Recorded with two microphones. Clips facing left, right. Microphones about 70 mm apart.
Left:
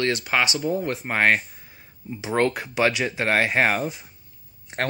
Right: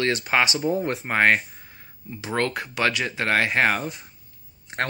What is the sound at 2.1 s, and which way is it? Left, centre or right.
Speech, centre.